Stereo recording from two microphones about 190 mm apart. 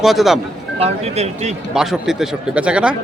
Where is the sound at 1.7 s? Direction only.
Centre (ahead or behind).